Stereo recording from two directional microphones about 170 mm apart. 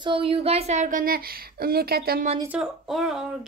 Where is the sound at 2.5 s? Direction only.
5° right (ahead or behind).